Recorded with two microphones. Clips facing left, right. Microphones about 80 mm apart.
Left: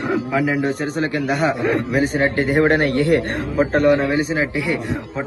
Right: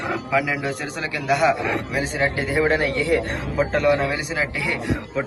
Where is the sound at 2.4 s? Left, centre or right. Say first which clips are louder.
Left 5 dB; left.